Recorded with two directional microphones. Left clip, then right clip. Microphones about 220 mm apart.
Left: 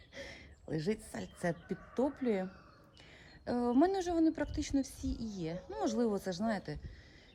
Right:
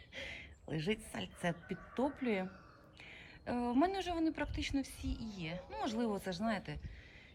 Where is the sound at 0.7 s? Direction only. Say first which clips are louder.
Left 2 dB; 5° left (ahead or behind).